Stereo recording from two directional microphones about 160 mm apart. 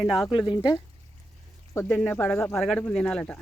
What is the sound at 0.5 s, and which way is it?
Speech, 30° left (ahead or behind).